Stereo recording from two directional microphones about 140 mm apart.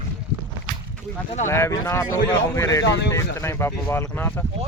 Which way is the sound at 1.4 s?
20° left (ahead or behind).